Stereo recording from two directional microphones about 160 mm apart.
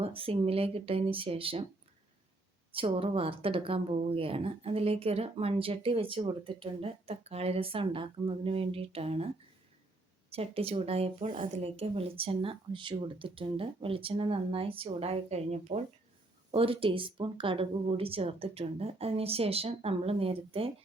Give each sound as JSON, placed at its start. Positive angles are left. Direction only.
{"t": 0.0, "sound": "a woman's voice", "side_deg": -35}
{"t": 2.7, "sound": "a woman's voice", "side_deg": -35}
{"t": 10.3, "sound": "a woman's voice", "side_deg": -40}